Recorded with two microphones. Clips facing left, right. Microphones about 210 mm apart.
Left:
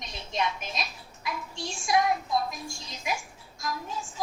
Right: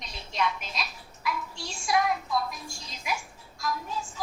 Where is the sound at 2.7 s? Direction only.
20° left (ahead or behind).